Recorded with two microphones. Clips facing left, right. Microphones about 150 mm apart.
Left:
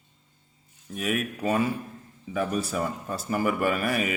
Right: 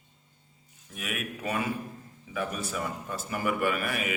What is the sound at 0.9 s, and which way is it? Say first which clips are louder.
A man's voice: left 7 dB; 35° left (ahead or behind).